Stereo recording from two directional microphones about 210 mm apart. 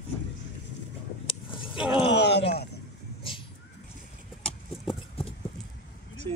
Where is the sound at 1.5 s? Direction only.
25° left (ahead or behind).